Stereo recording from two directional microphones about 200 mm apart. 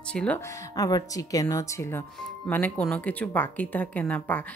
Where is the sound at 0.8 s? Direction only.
15° left (ahead or behind).